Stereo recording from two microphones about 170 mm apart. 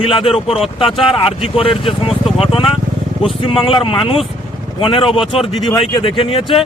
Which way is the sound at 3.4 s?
35° left (ahead or behind).